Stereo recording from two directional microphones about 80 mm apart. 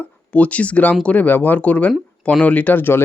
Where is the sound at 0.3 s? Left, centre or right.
Centre.